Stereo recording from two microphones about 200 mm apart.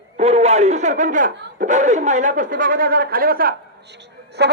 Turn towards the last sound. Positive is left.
turn(degrees=-55)  # may be behind; listen again after turning